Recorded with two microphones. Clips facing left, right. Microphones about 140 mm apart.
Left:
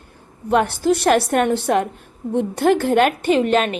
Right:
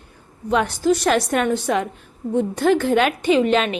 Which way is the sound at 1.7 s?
50° left (ahead or behind).